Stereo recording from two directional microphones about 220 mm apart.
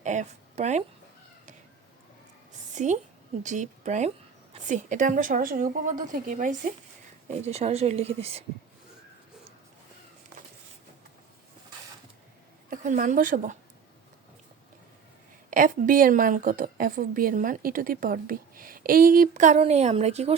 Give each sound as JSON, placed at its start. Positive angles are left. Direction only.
{"t": 0.0, "sound": "speech", "side_deg": -35}
{"t": 2.7, "sound": "a woman's voice", "side_deg": -35}
{"t": 12.7, "sound": "a woman's voice", "side_deg": -35}
{"t": 15.4, "sound": "a woman's voice", "side_deg": -40}